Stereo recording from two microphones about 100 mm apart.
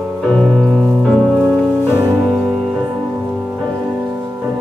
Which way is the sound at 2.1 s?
5° right (ahead or behind).